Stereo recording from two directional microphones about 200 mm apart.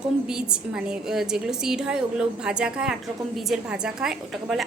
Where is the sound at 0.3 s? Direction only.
5° right (ahead or behind).